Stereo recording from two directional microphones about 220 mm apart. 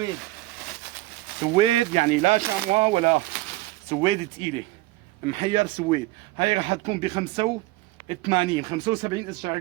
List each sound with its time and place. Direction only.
1.5 s speech: 25° right (ahead or behind)